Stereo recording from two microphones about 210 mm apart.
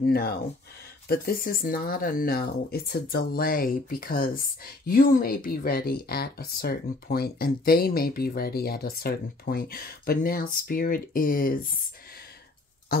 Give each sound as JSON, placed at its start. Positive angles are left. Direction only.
{"t": 0.0, "sound": "speech", "side_deg": 50}